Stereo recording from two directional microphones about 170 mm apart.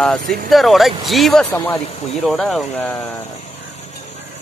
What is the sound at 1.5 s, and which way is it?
Speech, 20° left (ahead or behind).